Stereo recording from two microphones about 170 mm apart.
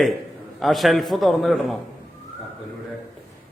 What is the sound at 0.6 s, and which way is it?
A man's voice, centre (ahead or behind).